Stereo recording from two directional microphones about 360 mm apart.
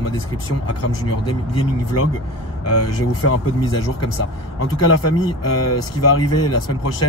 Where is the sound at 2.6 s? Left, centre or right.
Left.